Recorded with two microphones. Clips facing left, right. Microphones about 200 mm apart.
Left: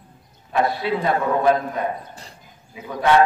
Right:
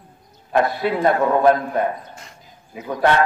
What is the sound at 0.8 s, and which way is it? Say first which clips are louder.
A man's voice: right 3 dB; 50° right (ahead or behind).